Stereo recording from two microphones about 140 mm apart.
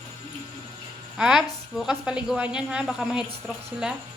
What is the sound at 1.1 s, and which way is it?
A woman's voice, 5° right (ahead or behind).